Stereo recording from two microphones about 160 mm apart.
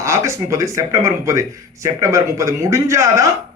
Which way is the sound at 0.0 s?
20° right (ahead or behind).